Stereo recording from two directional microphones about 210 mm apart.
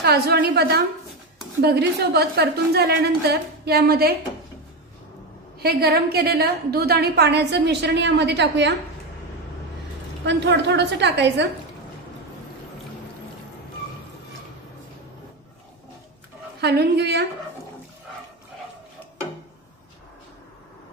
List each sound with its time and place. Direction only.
0.0 s a woman's voice: 50° right (ahead or behind)
5.6 s a woman's voice: 50° right (ahead or behind)
10.2 s a woman's voice: 55° right (ahead or behind)
16.6 s a woman's voice: 50° right (ahead or behind)